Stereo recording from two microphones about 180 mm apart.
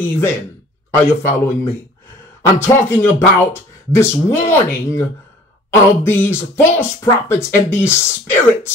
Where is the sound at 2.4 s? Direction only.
15° left (ahead or behind).